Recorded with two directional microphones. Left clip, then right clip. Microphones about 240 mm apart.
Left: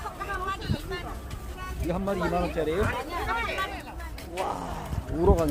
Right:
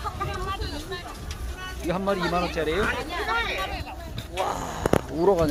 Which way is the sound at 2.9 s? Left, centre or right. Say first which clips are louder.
Right 3 dB; left.